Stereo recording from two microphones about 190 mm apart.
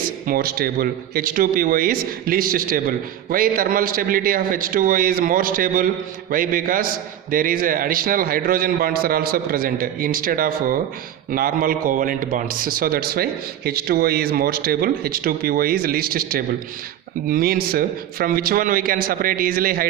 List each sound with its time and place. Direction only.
0.3 s a man's voice: 50° right (ahead or behind)